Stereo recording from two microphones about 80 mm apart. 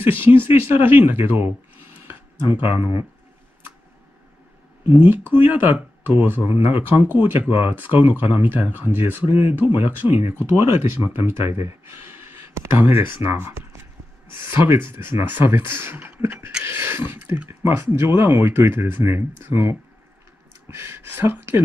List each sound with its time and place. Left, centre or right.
0.0 s speech: right
2.0 s a sound: right
4.8 s speech: right